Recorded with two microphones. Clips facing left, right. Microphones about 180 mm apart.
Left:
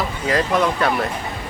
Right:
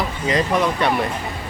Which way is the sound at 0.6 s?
5° right (ahead or behind).